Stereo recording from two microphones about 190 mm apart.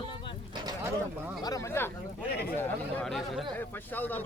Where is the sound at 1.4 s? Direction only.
15° left (ahead or behind).